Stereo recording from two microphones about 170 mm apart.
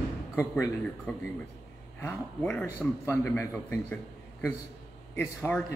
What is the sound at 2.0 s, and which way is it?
A man's voice, 10° left (ahead or behind).